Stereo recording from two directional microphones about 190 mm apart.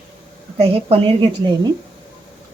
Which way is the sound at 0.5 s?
30° right (ahead or behind).